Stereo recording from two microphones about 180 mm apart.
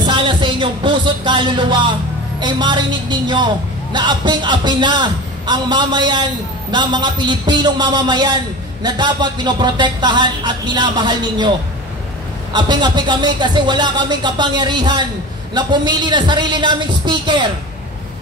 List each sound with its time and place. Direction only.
0.0 s a man's voice: 25° right (ahead or behind)
12.5 s a man's voice: 25° right (ahead or behind)